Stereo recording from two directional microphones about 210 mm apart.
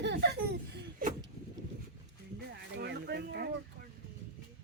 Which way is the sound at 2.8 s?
50° right (ahead or behind).